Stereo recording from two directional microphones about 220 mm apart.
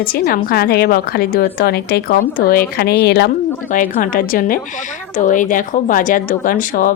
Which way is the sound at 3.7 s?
40° left (ahead or behind).